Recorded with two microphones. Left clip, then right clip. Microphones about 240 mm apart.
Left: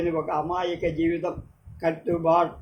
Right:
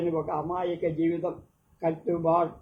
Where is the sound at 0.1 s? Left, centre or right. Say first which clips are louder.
Left 3 dB; left.